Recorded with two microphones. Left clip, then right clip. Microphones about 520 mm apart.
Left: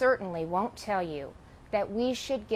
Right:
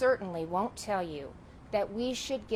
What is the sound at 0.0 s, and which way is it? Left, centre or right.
A woman's voice, left.